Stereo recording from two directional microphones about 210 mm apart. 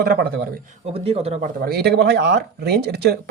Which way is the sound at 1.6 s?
50° right (ahead or behind).